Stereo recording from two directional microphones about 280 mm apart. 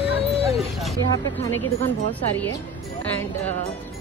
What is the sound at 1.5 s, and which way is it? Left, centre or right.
Speech, centre.